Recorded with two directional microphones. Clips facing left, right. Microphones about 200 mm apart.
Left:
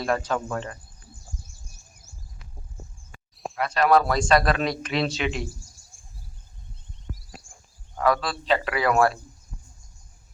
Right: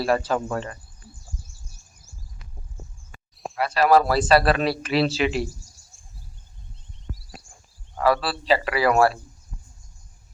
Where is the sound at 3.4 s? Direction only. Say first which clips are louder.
Right 2 dB; 5° right (ahead or behind).